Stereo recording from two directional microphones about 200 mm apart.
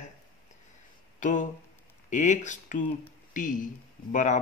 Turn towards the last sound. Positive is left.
turn(degrees=40)  # may be behind; listen again after turning